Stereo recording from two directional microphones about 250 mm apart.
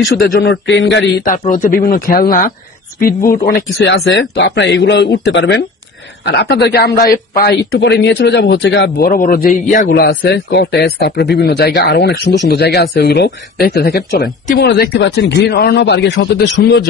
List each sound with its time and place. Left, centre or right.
0.1 s speech: left
1.2 s speech: left
3.7 s speech: left